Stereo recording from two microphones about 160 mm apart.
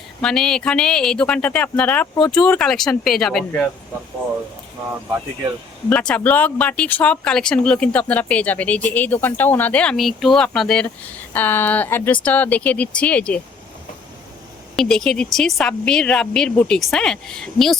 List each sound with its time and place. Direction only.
0.2 s a woman's voice: 5° left (ahead or behind)
5.9 s speech: 5° left (ahead or behind)
14.8 s a woman's voice: 5° left (ahead or behind)